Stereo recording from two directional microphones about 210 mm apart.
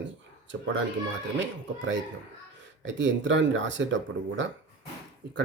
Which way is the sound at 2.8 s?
60° right (ahead or behind).